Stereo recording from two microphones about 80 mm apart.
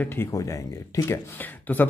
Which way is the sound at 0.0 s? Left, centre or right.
Left.